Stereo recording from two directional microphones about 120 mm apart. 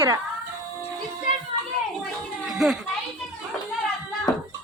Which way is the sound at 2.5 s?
5° right (ahead or behind).